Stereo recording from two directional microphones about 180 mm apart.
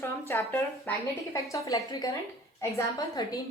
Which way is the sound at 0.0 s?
15° left (ahead or behind).